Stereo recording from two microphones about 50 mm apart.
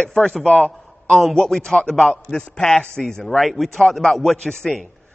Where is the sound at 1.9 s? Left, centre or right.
Centre.